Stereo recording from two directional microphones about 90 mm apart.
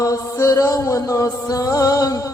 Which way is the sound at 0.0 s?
40° left (ahead or behind).